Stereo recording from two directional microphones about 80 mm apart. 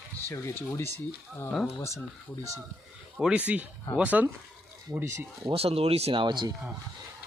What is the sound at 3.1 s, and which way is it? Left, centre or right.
Speech, centre.